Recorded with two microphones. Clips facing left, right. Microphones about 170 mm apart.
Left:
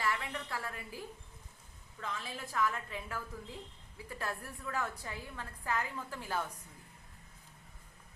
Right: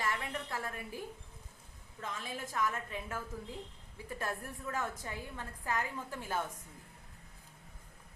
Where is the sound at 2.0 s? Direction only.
20° right (ahead or behind).